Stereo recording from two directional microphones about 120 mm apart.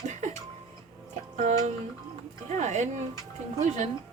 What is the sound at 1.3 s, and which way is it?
Speech, 90° right.